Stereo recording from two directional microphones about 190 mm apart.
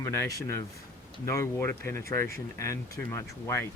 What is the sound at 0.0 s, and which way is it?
Speech, 15° left (ahead or behind).